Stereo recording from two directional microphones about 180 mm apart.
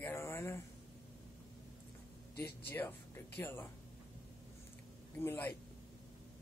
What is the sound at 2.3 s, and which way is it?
Speech, 10° left (ahead or behind).